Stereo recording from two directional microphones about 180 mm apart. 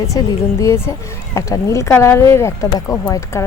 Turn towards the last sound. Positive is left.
turn(degrees=15)  # may be behind; listen again after turning